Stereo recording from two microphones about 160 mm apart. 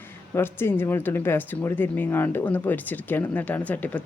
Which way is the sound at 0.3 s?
15° left (ahead or behind).